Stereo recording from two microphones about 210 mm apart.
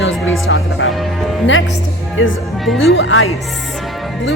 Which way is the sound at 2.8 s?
70° left (ahead or behind).